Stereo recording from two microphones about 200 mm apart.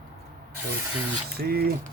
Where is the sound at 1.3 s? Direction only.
50° right (ahead or behind).